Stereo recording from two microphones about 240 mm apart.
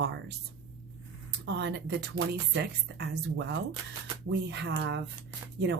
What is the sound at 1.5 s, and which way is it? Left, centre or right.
Speech, right.